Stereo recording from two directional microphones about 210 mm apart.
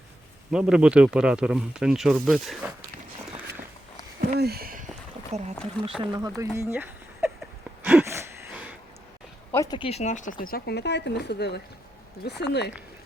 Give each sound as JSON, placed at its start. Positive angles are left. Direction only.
{"t": 0.5, "sound": "speech", "side_deg": -5}
{"t": 4.4, "sound": "speech", "side_deg": -50}
{"t": 5.3, "sound": "speech", "side_deg": -30}
{"t": 6.0, "sound": "speech", "side_deg": -20}
{"t": 7.8, "sound": "gasp", "side_deg": -10}
{"t": 9.5, "sound": "speech", "side_deg": 15}